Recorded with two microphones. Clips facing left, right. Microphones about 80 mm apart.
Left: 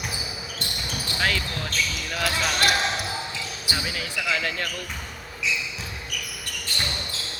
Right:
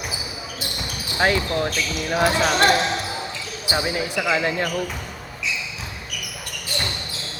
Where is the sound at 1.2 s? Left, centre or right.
Right.